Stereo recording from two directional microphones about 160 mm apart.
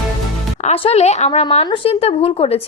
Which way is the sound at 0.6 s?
40° left (ahead or behind).